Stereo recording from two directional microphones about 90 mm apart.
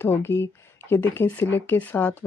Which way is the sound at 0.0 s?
25° left (ahead or behind).